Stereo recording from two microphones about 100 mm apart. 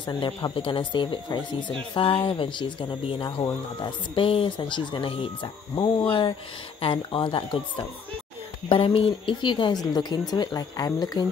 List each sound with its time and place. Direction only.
0.0 s a woman's voice: 50° left (ahead or behind)